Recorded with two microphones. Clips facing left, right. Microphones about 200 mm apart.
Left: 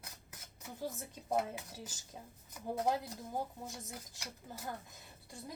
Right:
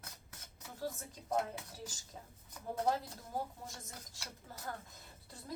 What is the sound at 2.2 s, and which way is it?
Speech, 15° left (ahead or behind).